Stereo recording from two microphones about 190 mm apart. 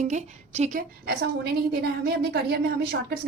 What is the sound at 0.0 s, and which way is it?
A woman's voice, 40° right (ahead or behind).